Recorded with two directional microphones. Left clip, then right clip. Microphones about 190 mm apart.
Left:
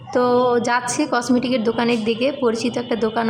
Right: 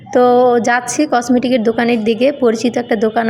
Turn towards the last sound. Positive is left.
turn(degrees=-20)  # may be behind; listen again after turning